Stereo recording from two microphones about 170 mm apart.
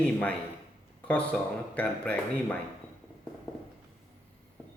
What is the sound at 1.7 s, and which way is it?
Speech, 10° left (ahead or behind).